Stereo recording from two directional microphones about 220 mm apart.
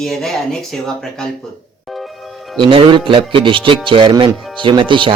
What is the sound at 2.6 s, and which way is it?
Speech, 25° right (ahead or behind).